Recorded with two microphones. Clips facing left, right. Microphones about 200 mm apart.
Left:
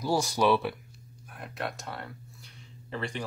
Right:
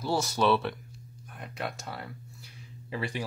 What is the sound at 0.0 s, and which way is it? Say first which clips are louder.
Speech: left 1 dB; 15° left (ahead or behind).